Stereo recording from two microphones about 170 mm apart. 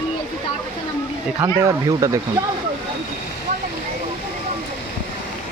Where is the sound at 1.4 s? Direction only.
15° right (ahead or behind).